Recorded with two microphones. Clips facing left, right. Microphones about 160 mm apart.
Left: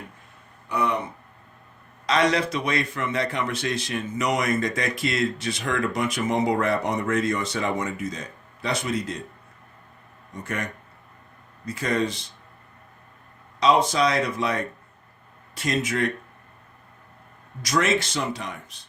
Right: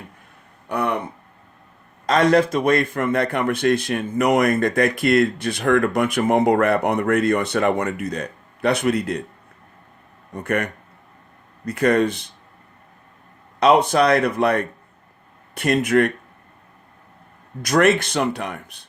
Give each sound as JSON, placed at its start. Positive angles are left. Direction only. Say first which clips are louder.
{"t": 0.7, "sound": "speech", "louder": "right 2 dB", "side_deg": -55}
{"t": 2.0, "sound": "speech", "louder": "right 6 dB", "side_deg": -50}
{"t": 10.3, "sound": "speech", "louder": "right 8 dB", "side_deg": -60}
{"t": 13.6, "sound": "speech", "louder": "right 5 dB", "side_deg": -60}
{"t": 17.6, "sound": "speech", "louder": "right 6 dB", "side_deg": -60}